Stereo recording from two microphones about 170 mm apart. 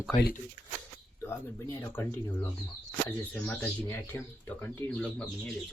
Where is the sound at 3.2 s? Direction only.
10° left (ahead or behind).